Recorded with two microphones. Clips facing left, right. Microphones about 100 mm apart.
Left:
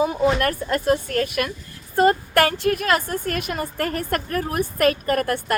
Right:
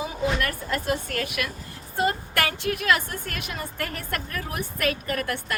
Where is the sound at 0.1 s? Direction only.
45° left (ahead or behind).